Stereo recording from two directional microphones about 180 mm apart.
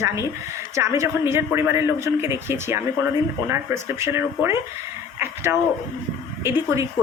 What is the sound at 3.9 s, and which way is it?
Speech, 15° right (ahead or behind).